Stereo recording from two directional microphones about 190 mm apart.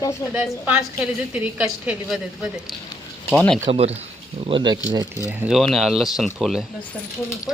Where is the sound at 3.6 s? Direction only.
35° right (ahead or behind).